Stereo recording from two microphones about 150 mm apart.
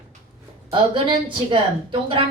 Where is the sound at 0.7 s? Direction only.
35° right (ahead or behind).